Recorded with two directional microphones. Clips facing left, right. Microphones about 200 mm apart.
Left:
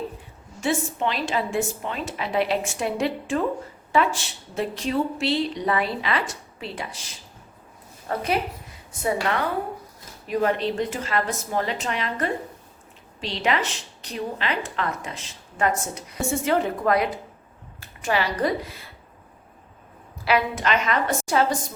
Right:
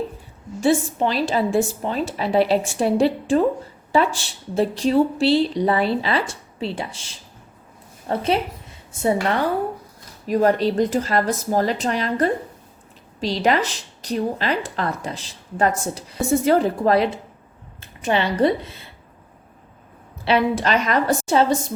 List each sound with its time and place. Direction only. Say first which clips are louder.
0.6 s a woman's voice: right 6 dB; 35° right (ahead or behind)
20.2 s a woman's voice: right 4 dB; 30° right (ahead or behind)